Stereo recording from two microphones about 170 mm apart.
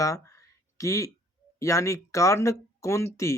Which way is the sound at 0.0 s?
20° left (ahead or behind).